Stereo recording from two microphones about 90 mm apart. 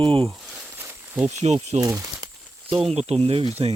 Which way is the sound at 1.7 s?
40° right (ahead or behind).